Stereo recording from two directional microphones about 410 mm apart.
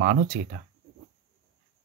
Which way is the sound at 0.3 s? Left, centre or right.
Right.